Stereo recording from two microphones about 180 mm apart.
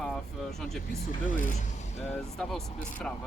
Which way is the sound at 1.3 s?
45° left (ahead or behind).